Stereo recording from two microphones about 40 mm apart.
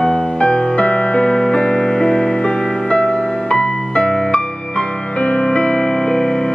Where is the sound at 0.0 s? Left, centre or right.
Centre.